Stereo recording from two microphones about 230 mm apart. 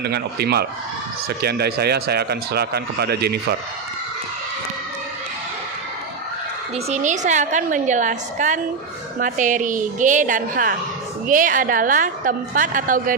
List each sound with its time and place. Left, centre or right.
0.0 s a man's voice: right
6.7 s a woman's voice: right